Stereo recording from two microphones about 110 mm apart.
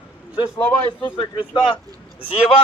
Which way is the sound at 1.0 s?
50° left (ahead or behind).